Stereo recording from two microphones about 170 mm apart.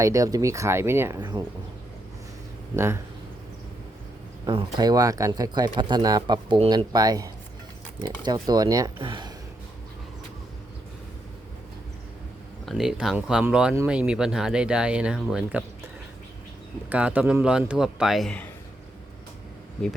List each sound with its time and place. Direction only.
0.0 s speech: 20° right (ahead or behind)
2.7 s speech: 15° right (ahead or behind)
4.4 s speech: 25° right (ahead or behind)
12.6 s speech: centre (ahead or behind)
16.9 s speech: 10° right (ahead or behind)